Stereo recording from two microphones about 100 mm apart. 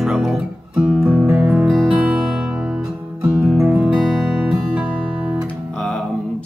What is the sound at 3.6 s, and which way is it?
Music, 20° right (ahead or behind).